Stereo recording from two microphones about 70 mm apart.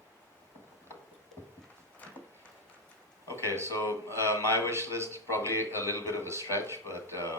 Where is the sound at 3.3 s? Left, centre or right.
Right.